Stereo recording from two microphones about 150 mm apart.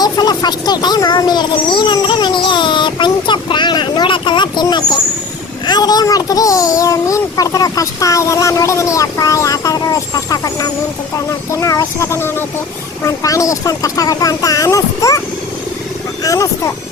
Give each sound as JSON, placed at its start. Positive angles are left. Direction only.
{"t": 0.0, "sound": "a child's voice", "side_deg": 30}
{"t": 16.2, "sound": "a child's voice", "side_deg": 20}